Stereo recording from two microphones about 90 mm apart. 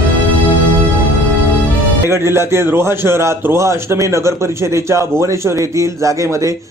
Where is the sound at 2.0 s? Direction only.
30° right (ahead or behind).